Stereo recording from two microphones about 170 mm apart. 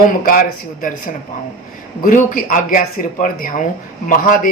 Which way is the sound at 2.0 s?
50° left (ahead or behind).